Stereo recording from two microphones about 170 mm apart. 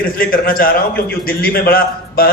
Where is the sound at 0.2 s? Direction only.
55° left (ahead or behind).